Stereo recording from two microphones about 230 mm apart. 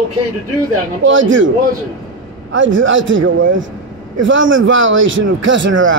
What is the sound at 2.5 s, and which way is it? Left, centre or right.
A man's voice, right.